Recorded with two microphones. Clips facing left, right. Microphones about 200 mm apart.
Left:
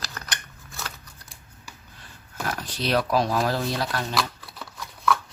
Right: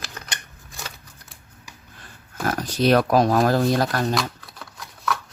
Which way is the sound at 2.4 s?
45° right (ahead or behind).